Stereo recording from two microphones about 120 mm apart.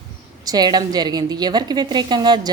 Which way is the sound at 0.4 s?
35° right (ahead or behind).